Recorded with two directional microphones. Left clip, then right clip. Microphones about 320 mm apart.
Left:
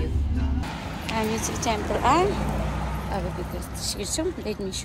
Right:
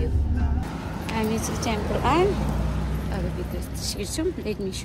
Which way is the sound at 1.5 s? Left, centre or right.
Centre.